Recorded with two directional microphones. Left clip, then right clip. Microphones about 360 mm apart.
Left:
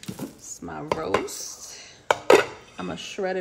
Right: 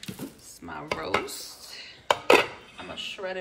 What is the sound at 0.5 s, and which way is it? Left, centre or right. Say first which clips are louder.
Speech: left 4 dB; centre.